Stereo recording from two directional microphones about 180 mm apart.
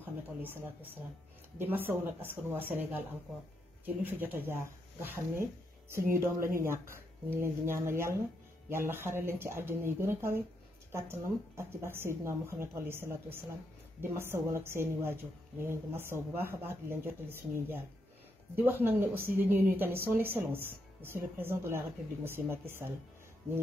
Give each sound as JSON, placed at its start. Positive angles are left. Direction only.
{"t": 1.6, "sound": "speech", "side_deg": -10}